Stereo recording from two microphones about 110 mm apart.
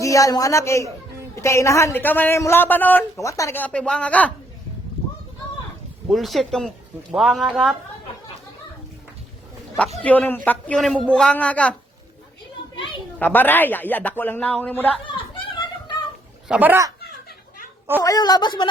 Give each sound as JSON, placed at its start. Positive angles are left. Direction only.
{"t": 0.0, "sound": "a woman's voice", "side_deg": 30}
{"t": 3.2, "sound": "a woman's voice", "side_deg": 30}
{"t": 3.6, "sound": "speech", "side_deg": 10}
{"t": 6.1, "sound": "speech", "side_deg": 0}
{"t": 10.0, "sound": "speech", "side_deg": 15}
{"t": 12.7, "sound": "a sound", "side_deg": 50}
{"t": 13.1, "sound": "speech", "side_deg": 15}
{"t": 15.0, "sound": "a sound", "side_deg": 50}
{"t": 16.5, "sound": "speech", "side_deg": -15}
{"t": 18.0, "sound": "a woman's voice", "side_deg": 35}